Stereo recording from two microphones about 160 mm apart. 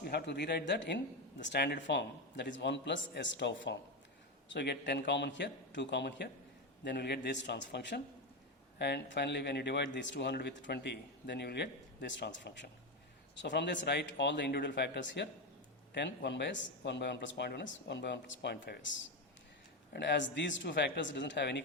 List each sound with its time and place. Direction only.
0.0 s speech: 90° left
19.9 s speech: 90° left